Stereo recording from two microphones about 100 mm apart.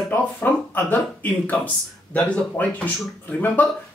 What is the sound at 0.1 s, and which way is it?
Speech, 20° left (ahead or behind).